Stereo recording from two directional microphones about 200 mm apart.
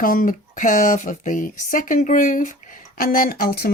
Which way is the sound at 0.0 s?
45° left (ahead or behind).